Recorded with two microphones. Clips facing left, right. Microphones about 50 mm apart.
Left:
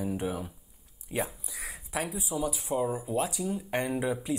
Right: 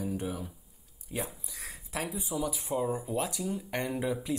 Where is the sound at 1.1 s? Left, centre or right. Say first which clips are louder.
Left 4 dB; centre.